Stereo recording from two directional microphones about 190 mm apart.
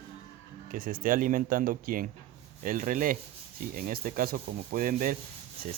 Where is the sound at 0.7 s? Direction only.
45° right (ahead or behind).